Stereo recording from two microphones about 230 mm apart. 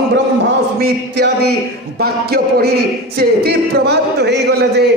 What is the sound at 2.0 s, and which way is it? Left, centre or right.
Speech, right.